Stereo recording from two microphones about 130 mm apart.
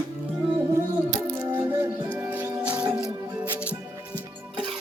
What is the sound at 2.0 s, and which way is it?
Music, 15° right (ahead or behind).